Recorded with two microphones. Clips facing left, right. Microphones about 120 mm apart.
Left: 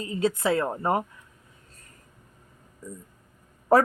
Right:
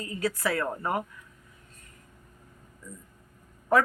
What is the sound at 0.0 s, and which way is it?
A woman's voice, 25° left (ahead or behind).